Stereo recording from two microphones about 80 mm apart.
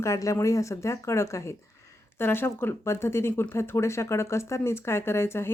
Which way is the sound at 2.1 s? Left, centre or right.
Left.